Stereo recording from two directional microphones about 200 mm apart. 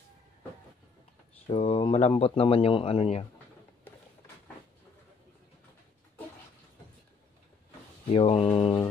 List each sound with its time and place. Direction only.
1.5 s speech: 30° left (ahead or behind)
8.1 s speech: 30° left (ahead or behind)